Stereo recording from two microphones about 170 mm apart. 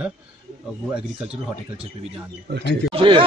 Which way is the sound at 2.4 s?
90° right.